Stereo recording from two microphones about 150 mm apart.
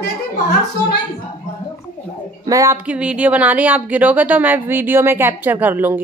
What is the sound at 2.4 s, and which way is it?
Speech, 20° right (ahead or behind).